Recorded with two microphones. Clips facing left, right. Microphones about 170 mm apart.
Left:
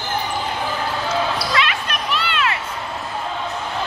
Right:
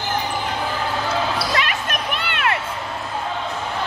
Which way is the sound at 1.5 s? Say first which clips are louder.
Left 1 dB; 45° right (ahead or behind).